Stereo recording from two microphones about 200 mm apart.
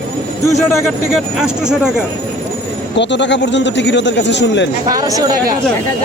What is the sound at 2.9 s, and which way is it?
Speech, 60° left (ahead or behind).